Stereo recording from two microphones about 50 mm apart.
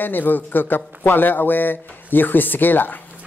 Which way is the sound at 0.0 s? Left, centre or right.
Left.